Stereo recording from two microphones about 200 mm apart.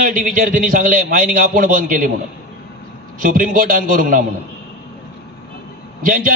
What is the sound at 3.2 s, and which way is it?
A man's voice, 45° right (ahead or behind).